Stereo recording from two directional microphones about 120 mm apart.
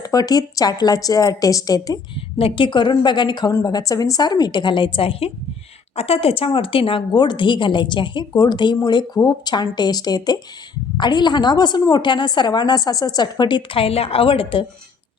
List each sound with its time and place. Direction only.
0.0 s speech: 30° left (ahead or behind)
2.4 s speech: 45° left (ahead or behind)